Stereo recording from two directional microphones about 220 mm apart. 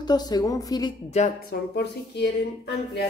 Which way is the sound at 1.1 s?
40° left (ahead or behind).